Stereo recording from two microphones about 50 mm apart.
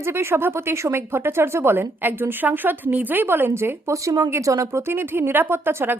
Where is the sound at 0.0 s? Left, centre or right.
Right.